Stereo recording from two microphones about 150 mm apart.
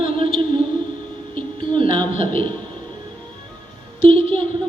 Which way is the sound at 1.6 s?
35° right (ahead or behind).